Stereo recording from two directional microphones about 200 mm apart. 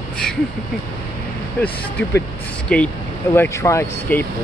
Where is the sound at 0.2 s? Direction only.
5° left (ahead or behind).